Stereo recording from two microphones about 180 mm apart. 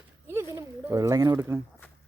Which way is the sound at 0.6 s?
20° right (ahead or behind).